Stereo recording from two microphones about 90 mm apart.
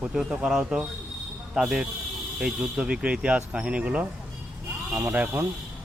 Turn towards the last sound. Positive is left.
turn(degrees=-15)  # may be behind; listen again after turning